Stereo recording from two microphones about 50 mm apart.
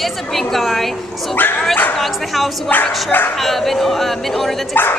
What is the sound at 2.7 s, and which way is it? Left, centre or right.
Speech, left.